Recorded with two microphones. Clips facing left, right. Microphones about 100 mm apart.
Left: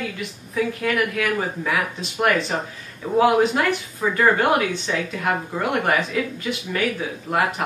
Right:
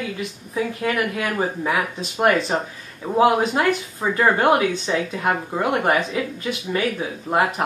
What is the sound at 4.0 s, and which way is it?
Speech, 25° right (ahead or behind).